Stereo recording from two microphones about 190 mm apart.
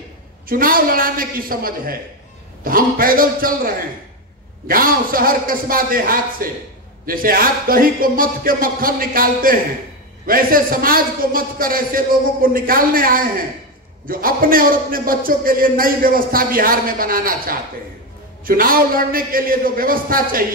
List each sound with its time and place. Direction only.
0.5 s a man's voice: 50° right (ahead or behind)